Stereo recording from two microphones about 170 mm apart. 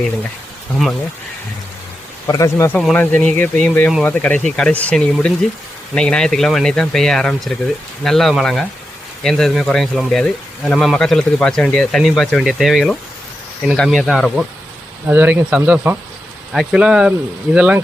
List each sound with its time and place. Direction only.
2.2 s speech: 20° left (ahead or behind); by 14.4 s centre (ahead or behind)
15.0 s speech: 10° right (ahead or behind)